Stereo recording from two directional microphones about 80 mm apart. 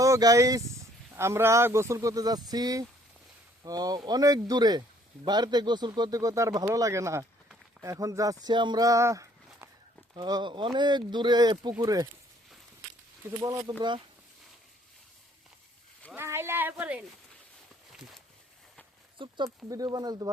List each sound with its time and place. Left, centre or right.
0.0 s speech: right
1.1 s speech: right
8.8 s a sound: right
10.2 s speech: right
13.4 s speech: right
13.7 s speech: right
16.1 s speech: right
17.9 s a sound: centre
19.2 s speech: right
19.6 s speech: right